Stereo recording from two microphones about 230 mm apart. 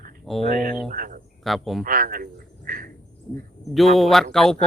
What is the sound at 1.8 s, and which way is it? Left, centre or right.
Speech, right.